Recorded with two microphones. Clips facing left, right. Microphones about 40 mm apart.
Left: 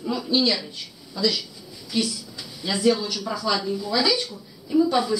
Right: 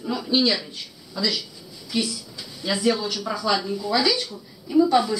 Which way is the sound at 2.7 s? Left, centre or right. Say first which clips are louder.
Left 2 dB; centre.